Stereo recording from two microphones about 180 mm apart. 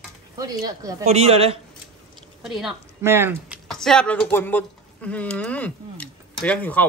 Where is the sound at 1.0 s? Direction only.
35° right (ahead or behind).